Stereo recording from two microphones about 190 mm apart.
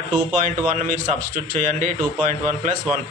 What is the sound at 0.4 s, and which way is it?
A man's voice, 40° right (ahead or behind).